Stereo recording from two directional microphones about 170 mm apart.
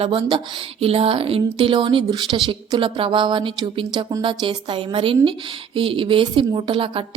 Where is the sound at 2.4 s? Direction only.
30° right (ahead or behind).